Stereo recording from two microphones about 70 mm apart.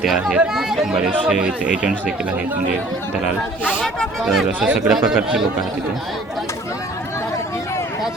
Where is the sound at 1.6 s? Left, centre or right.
Centre.